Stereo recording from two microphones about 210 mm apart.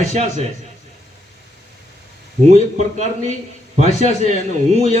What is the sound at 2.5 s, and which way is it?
Speech, 35° right (ahead or behind).